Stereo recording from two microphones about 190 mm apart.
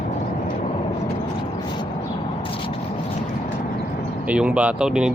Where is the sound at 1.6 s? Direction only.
25° left (ahead or behind).